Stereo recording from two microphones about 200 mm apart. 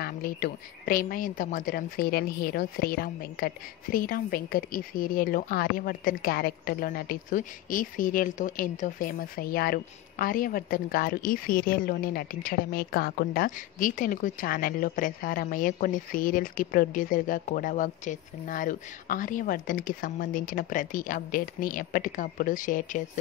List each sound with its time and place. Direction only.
0.0 s a woman's voice: 45° left (ahead or behind)